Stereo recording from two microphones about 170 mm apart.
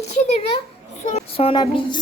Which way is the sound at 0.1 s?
40° left (ahead or behind).